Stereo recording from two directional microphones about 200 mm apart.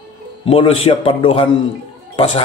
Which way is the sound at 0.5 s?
25° left (ahead or behind).